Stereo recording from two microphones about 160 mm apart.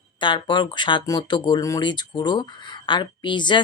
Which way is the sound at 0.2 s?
30° left (ahead or behind).